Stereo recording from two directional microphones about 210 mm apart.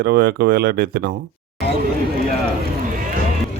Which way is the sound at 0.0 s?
50° right (ahead or behind).